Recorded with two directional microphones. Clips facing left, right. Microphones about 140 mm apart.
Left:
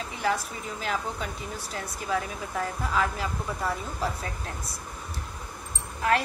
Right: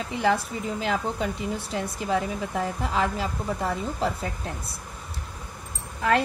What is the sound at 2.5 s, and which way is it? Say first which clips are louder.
Speech: even; 15° right (ahead or behind).